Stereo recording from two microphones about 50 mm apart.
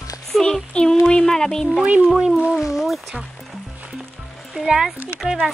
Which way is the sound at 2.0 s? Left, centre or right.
Centre.